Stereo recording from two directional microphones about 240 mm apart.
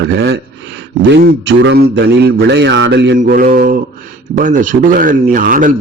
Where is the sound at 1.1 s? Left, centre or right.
Right.